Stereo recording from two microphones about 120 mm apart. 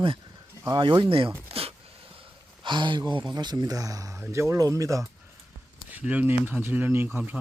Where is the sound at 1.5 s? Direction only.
55° right (ahead or behind).